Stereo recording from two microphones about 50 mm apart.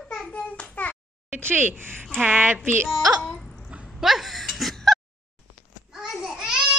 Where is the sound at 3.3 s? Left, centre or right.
Centre.